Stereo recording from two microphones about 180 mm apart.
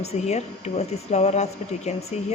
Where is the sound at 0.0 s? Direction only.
35° left (ahead or behind).